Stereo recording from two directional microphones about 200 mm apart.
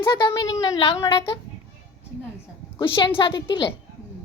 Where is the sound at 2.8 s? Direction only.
25° left (ahead or behind).